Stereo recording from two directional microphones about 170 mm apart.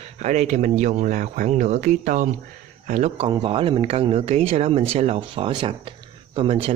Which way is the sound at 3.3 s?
30° right (ahead or behind).